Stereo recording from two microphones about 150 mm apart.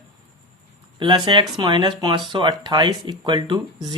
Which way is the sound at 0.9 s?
30° right (ahead or behind).